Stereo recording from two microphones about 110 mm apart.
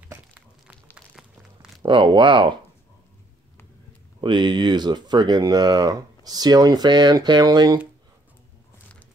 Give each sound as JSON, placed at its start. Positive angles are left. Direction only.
{"t": 0.9, "sound": "a sound", "side_deg": -5}
{"t": 1.8, "sound": "speech", "side_deg": -45}
{"t": 4.2, "sound": "speech", "side_deg": -45}